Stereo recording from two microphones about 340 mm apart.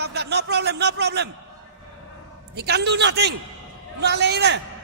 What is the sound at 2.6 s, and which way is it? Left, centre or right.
A man's voice, right.